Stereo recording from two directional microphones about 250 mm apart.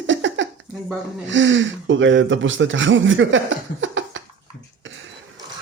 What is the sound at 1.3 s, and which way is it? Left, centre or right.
Speech, right.